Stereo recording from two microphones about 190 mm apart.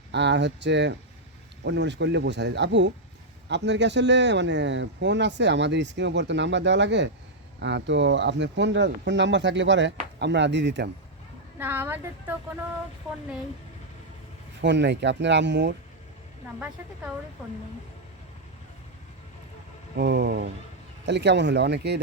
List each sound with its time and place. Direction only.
0.1 s speech: 65° right (ahead or behind)
11.6 s a woman's voice: 10° right (ahead or behind)
14.6 s speech: 65° right (ahead or behind)
20.0 s speech: 60° right (ahead or behind)